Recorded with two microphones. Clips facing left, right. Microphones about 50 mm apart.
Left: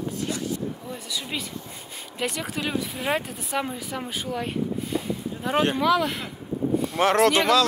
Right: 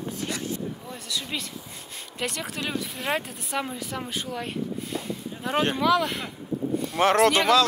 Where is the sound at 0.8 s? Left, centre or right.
Centre.